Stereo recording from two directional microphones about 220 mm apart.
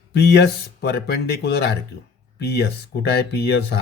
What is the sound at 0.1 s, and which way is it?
Speech, 50° left (ahead or behind).